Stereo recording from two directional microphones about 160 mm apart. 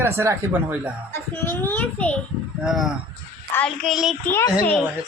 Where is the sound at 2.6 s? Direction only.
5° right (ahead or behind).